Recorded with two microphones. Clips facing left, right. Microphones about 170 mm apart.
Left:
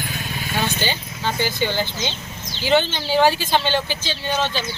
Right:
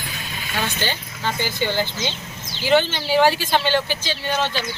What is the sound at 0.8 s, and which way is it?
Speech, 15° left (ahead or behind).